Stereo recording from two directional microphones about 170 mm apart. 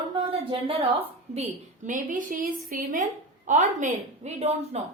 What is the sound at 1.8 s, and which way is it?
A woman's voice, 50° right (ahead or behind).